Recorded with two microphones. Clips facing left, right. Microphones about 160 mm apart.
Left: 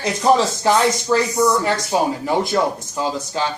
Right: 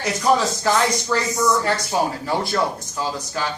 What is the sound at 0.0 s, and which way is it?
Speech, 25° left (ahead or behind).